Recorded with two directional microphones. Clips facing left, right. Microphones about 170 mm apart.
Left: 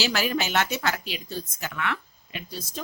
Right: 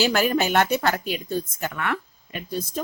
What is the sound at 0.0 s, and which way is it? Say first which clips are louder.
A woman's voice: right 5 dB; 50° right (ahead or behind).